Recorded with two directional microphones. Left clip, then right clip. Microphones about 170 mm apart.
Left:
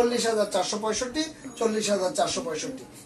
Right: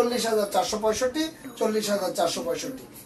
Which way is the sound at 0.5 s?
15° left (ahead or behind).